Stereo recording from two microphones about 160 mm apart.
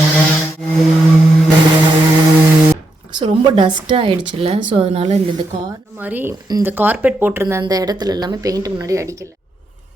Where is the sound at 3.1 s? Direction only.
30° right (ahead or behind).